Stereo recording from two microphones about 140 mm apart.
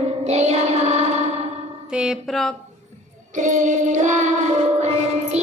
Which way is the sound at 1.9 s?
5° right (ahead or behind).